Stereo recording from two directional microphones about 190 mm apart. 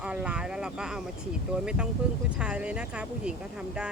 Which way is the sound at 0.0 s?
5° right (ahead or behind).